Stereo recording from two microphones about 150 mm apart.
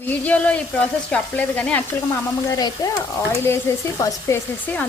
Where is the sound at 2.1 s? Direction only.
20° left (ahead or behind).